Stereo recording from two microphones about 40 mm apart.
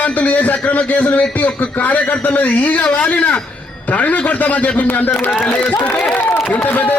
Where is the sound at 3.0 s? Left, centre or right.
Left.